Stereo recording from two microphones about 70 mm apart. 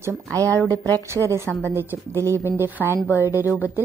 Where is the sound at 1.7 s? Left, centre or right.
Right.